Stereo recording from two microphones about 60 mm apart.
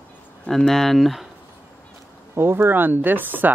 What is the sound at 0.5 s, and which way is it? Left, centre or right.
Speech, centre.